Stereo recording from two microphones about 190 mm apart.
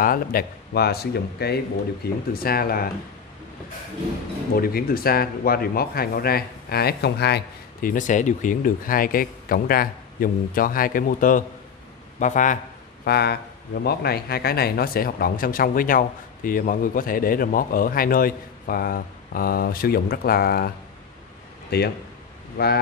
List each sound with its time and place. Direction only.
0.0 s speech: 50° left (ahead or behind)
4.6 s a man's voice: 50° left (ahead or behind)
13.0 s a man's voice: 60° left (ahead or behind)